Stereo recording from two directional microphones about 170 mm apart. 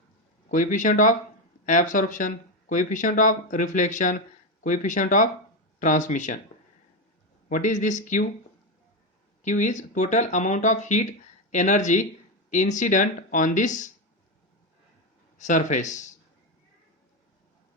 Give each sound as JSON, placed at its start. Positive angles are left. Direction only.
{"t": 0.4, "sound": "speech", "side_deg": 45}
{"t": 7.5, "sound": "speech", "side_deg": 50}
{"t": 9.4, "sound": "speech", "side_deg": 45}
{"t": 15.4, "sound": "speech", "side_deg": 45}